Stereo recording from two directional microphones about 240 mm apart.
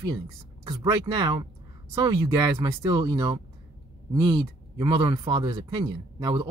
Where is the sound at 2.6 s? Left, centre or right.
Centre.